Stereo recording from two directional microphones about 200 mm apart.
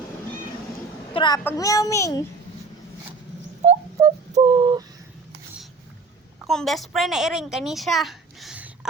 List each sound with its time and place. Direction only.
1.1 s a woman's voice: 25° left (ahead or behind)
3.6 s a sound: 35° right (ahead or behind); by 4.9 s 20° right (ahead or behind)
6.5 s a woman's voice: centre (ahead or behind)